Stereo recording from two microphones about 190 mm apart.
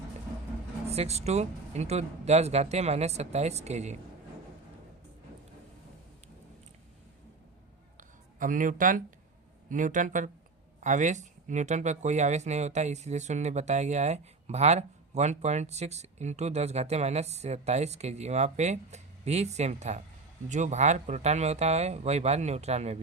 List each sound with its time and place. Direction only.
0.9 s speech: 35° right (ahead or behind)
7.9 s a sound: 45° right (ahead or behind)
9.6 s speech: 40° right (ahead or behind)